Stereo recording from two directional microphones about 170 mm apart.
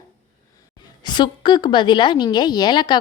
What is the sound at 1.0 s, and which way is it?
A woman's voice, 25° left (ahead or behind).